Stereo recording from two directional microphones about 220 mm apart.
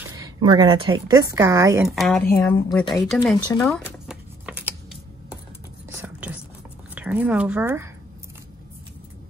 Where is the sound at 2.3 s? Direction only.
15° left (ahead or behind).